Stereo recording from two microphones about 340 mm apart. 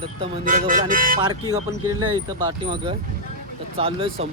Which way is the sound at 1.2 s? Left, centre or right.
Centre.